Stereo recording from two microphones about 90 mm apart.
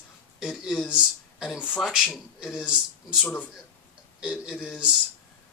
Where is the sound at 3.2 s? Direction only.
10° left (ahead or behind).